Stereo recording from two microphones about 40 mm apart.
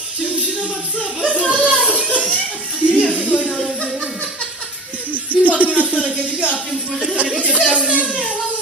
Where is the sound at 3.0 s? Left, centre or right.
Left.